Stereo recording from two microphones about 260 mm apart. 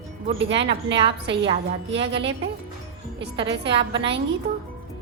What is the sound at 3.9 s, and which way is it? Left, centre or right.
Speech, right.